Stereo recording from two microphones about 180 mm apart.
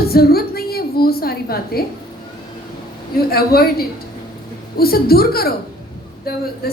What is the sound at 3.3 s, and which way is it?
A woman's voice, 55° left (ahead or behind).